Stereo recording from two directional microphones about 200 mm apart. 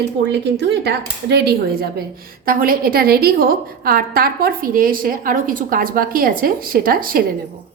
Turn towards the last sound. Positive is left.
turn(degrees=-45)  # may be behind; listen again after turning